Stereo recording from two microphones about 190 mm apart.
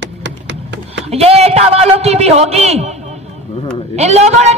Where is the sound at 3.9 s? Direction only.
35° right (ahead or behind).